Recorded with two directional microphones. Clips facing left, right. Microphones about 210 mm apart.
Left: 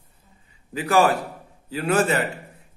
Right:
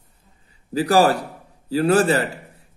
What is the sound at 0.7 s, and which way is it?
A man's voice, 35° right (ahead or behind).